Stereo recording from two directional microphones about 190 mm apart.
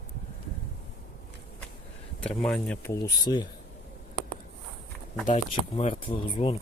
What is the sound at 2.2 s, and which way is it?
Speech, 5° left (ahead or behind).